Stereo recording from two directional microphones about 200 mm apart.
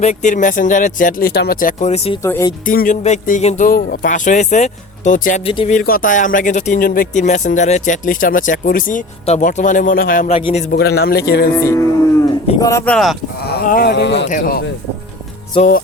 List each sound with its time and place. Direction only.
0.0 s speech: 35° left (ahead or behind)
2.2 s speech: 15° left (ahead or behind)
2.6 s speech: 40° left (ahead or behind)
5.5 s speech: 25° left (ahead or behind)
5.7 s speech: 45° left (ahead or behind)
10.3 s speech: 30° left (ahead or behind)
11.5 s speech: 15° left (ahead or behind)
13.4 s speech: 50° left (ahead or behind)
14.3 s speech: 45° left (ahead or behind)